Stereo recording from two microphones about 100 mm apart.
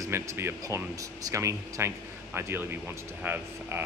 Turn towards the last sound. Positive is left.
turn(degrees=-20)  # may be behind; listen again after turning